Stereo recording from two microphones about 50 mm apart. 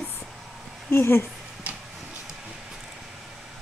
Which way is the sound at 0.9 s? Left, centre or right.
Left.